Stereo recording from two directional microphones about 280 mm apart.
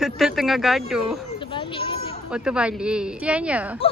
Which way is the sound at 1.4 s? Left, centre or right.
Centre.